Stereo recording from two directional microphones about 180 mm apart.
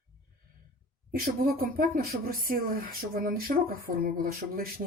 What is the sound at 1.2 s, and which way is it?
Speech, 50° right (ahead or behind).